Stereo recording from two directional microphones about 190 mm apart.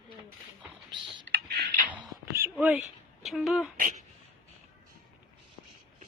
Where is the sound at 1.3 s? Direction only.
60° right (ahead or behind).